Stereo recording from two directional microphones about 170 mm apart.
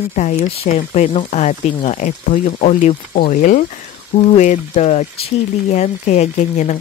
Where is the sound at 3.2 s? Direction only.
55° left (ahead or behind).